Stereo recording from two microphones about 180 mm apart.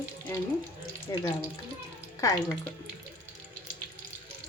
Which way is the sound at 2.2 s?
20° left (ahead or behind).